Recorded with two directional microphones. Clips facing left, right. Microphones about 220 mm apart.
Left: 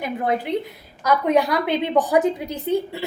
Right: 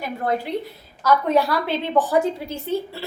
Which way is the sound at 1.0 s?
15° left (ahead or behind).